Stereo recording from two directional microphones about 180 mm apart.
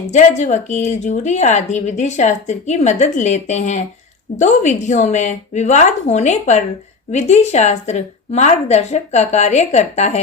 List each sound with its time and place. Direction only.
0.1 s a woman's voice: 40° left (ahead or behind)